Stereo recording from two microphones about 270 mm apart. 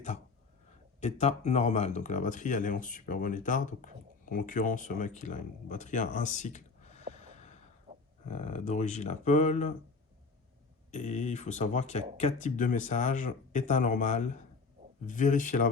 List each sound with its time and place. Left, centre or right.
0.9 s speech: left
7.1 s a sound: left
8.3 s speech: left
10.9 s speech: left